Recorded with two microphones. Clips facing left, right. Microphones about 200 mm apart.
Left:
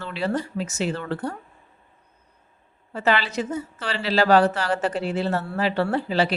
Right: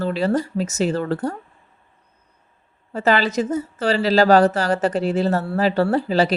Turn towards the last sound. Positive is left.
turn(degrees=-40)  # may be behind; listen again after turning